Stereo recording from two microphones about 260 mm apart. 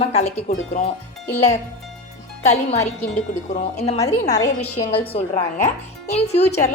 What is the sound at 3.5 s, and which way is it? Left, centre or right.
Speech, left.